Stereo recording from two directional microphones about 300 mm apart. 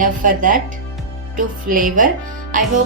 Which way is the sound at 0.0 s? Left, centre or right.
Right.